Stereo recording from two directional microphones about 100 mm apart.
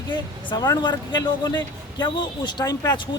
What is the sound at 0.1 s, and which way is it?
Speech, 40° left (ahead or behind).